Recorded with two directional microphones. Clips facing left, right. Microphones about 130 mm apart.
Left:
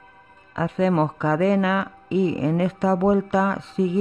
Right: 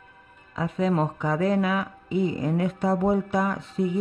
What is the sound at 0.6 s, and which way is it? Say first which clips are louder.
Speech: left 4 dB; 90° left.